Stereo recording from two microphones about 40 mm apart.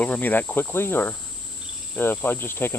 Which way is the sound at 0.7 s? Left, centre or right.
Left.